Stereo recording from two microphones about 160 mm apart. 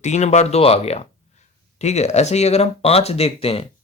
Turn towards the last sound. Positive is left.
turn(degrees=35)  # may be behind; listen again after turning